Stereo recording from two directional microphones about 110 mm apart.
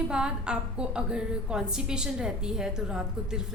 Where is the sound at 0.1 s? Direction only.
10° right (ahead or behind).